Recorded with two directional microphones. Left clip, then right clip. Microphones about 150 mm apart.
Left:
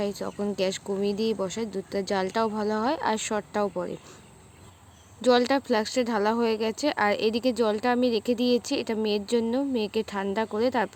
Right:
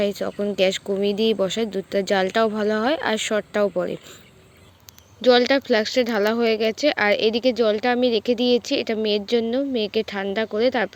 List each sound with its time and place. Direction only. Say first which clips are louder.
0.0 s speech: right 7 dB; 10° right (ahead or behind)
5.2 s speech: right 5 dB; 5° right (ahead or behind)